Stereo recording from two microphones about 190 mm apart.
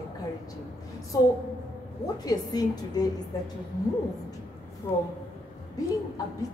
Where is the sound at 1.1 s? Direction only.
20° left (ahead or behind).